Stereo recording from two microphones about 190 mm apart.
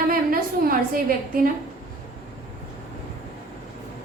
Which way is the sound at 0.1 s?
50° right (ahead or behind).